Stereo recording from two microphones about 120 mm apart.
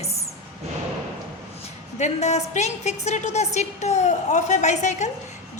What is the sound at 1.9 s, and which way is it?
A woman's voice, 70° left (ahead or behind).